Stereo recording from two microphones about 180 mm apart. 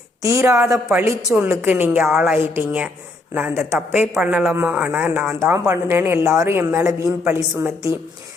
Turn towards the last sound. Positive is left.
turn(degrees=-15)  # may be behind; listen again after turning